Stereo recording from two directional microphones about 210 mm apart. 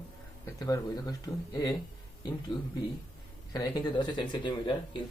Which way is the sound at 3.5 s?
20° left (ahead or behind).